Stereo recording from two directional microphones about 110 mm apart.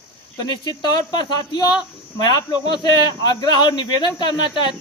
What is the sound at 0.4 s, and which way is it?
A man's voice, 40° left (ahead or behind).